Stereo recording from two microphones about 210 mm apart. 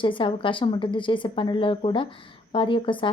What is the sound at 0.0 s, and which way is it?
Speech, 25° left (ahead or behind).